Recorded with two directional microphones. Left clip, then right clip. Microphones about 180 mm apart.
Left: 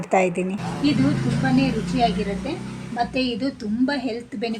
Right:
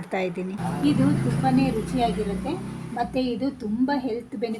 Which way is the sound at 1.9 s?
20° left (ahead or behind).